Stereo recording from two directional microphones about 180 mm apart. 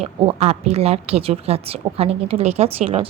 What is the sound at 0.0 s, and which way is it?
A woman's voice, 35° right (ahead or behind).